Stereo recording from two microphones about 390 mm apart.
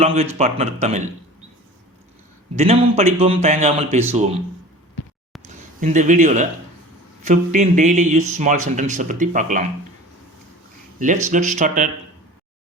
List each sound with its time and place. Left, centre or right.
0.0 s a man's voice: centre
2.6 s a man's voice: centre
5.8 s speech: centre
11.3 s speech: centre